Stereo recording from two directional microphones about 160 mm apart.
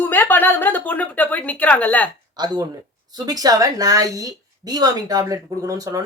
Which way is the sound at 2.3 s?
25° right (ahead or behind).